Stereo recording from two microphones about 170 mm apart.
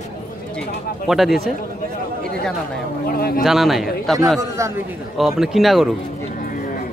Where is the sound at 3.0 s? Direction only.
60° left (ahead or behind).